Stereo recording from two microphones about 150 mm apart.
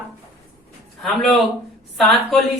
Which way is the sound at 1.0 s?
Centre (ahead or behind).